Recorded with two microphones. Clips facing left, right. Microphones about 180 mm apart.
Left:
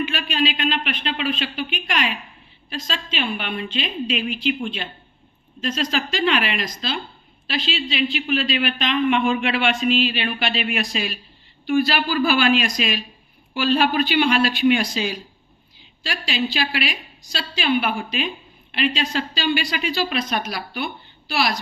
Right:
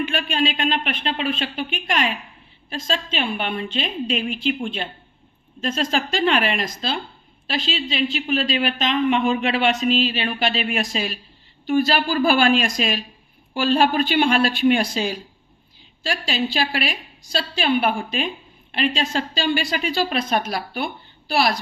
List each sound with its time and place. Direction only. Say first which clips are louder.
0.1 s speech: right 1 dB; 50° right (ahead or behind)
16.5 s a woman's voice: right 1 dB; 45° right (ahead or behind)